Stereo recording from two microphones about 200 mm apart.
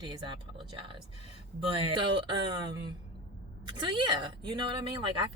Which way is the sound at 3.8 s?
25° right (ahead or behind).